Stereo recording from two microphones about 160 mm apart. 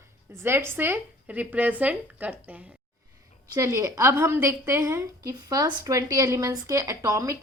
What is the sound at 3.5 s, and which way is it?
A woman's voice, 20° right (ahead or behind).